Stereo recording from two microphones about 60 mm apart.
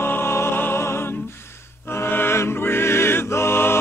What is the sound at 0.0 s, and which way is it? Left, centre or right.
Music, left.